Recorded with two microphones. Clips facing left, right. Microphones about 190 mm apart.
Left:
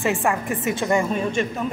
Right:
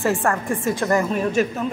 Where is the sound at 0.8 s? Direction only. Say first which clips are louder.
Even; centre (ahead or behind).